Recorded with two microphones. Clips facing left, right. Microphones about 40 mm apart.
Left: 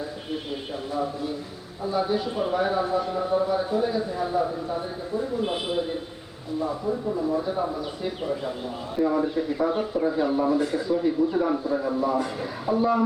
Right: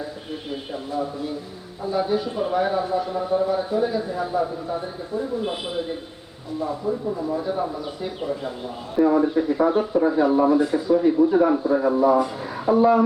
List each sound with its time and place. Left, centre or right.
1.8 s a man's voice: centre
6.9 s a man's voice: centre
9.0 s speech: centre
10.3 s speech: centre